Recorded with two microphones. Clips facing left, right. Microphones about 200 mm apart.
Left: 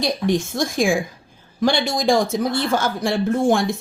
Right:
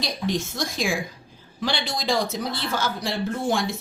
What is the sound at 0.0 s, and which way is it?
Speech, 50° left (ahead or behind).